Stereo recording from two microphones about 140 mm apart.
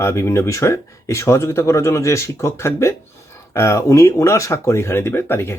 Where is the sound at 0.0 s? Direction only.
20° left (ahead or behind).